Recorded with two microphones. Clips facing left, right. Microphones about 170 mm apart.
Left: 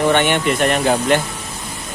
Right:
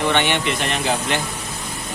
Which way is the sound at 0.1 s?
45° left (ahead or behind).